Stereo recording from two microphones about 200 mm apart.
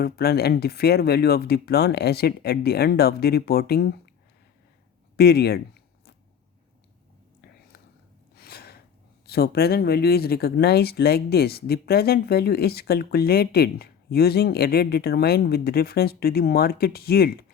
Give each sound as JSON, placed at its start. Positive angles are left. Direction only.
{"t": 0.0, "sound": "speech", "side_deg": 50}
{"t": 5.1, "sound": "a sound", "side_deg": 50}
{"t": 8.4, "sound": "gasp", "side_deg": 50}
{"t": 9.2, "sound": "speech", "side_deg": 50}